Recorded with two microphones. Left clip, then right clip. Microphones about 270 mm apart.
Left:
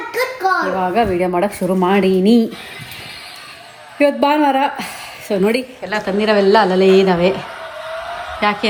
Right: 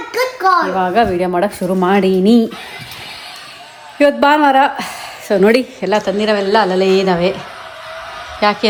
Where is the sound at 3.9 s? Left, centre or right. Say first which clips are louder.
Right 3 dB; centre.